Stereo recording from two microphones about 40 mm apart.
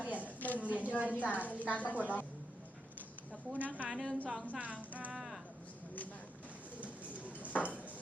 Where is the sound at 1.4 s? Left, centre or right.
Right.